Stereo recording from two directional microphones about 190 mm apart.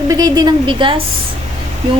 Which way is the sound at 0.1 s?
20° right (ahead or behind).